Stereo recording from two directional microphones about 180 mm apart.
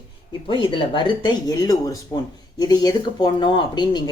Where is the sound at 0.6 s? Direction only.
25° left (ahead or behind).